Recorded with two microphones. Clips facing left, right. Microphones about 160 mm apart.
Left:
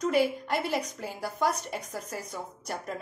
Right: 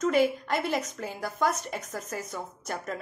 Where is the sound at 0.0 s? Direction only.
10° left (ahead or behind).